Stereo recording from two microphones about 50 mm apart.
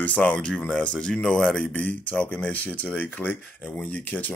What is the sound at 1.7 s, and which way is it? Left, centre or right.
Speech, left.